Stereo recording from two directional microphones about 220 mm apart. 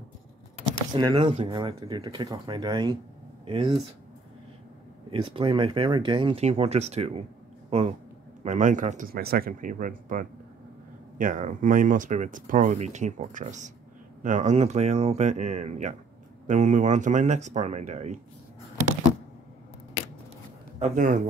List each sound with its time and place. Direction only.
0.9 s speech: 25° right (ahead or behind)
5.1 s speech: 20° right (ahead or behind)
20.8 s speech: 35° right (ahead or behind)